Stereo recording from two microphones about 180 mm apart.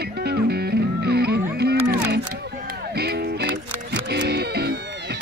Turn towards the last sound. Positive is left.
turn(degrees=-65)  # may be behind; listen again after turning